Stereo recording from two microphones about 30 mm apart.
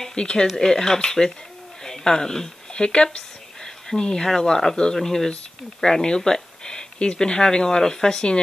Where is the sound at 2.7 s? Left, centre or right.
Left.